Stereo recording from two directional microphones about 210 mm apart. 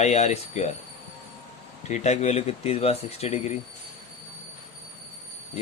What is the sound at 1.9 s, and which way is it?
Speech, 35° left (ahead or behind).